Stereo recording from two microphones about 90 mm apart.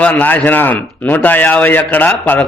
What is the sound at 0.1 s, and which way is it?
A man's voice, 20° left (ahead or behind).